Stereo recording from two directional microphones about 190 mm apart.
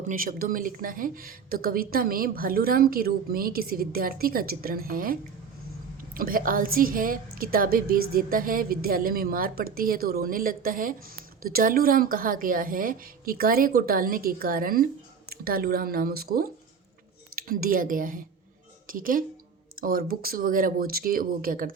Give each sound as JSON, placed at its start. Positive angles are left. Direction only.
{"t": 0.1, "sound": "a woman's voice", "side_deg": -45}
{"t": 6.1, "sound": "a woman's voice", "side_deg": -50}